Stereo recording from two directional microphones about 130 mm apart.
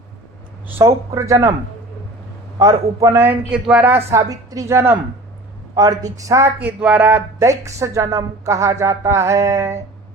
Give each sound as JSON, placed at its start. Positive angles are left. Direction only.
{"t": 0.8, "sound": "speech", "side_deg": -20}
{"t": 2.6, "sound": "speech", "side_deg": -25}
{"t": 3.5, "sound": "a woman's voice", "side_deg": -10}
{"t": 6.6, "sound": "speech", "side_deg": -10}